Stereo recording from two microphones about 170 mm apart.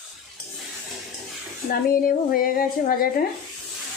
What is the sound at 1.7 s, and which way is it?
A woman's voice, 55° left (ahead or behind).